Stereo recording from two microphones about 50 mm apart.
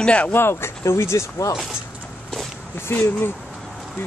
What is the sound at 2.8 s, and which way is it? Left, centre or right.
Speech, left.